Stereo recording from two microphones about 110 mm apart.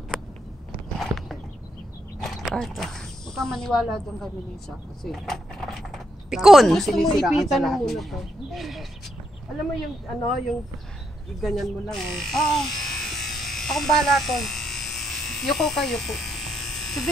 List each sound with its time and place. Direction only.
2.2 s speech: centre (ahead or behind)
11.4 s electric shaver: centre (ahead or behind)